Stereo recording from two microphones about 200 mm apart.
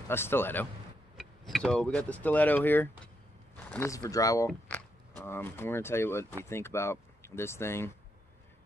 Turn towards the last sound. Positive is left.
turn(degrees=15)  # may be behind; listen again after turning